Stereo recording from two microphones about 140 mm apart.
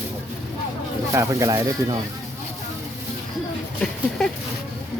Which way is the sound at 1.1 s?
20° right (ahead or behind).